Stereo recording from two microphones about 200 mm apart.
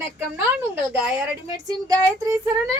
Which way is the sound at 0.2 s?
10° right (ahead or behind).